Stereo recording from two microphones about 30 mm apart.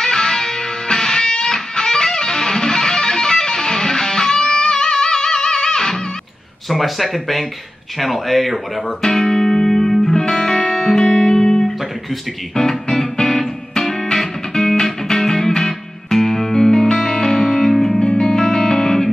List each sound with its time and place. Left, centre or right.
0.0 s music: centre
6.7 s speech: centre
9.0 s music: centre
17.6 s music: centre
18.2 s music: left